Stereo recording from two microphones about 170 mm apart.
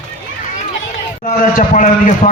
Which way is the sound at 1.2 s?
50° left (ahead or behind).